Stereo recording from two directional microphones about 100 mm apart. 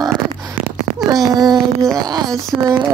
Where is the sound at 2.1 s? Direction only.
40° right (ahead or behind).